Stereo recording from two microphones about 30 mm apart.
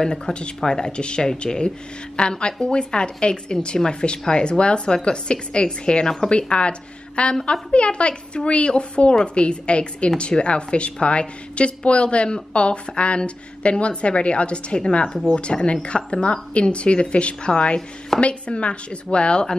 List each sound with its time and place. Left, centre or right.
0.0 s a woman's voice: left